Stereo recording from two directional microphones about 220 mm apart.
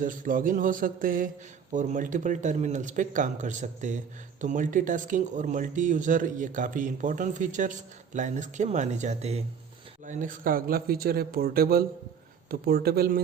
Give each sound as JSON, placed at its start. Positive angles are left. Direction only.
{"t": 0.0, "sound": "speech", "side_deg": -35}